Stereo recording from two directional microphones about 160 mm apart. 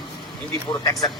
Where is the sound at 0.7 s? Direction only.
25° left (ahead or behind).